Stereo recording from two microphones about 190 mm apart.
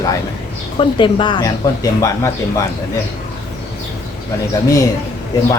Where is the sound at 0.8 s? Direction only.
25° left (ahead or behind).